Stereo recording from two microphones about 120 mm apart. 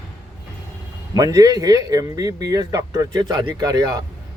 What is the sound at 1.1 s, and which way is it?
Speech, 30° right (ahead or behind).